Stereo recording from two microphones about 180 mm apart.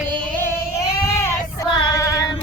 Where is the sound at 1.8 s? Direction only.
15° left (ahead or behind).